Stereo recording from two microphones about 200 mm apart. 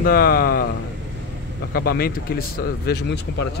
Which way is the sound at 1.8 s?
50° left (ahead or behind).